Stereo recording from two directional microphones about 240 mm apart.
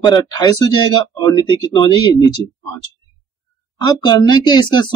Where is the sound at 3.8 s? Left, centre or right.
Centre.